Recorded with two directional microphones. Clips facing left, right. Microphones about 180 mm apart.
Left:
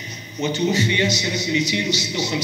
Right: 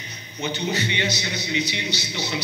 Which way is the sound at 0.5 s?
45° left (ahead or behind).